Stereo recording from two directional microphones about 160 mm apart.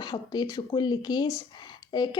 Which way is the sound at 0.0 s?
25° left (ahead or behind).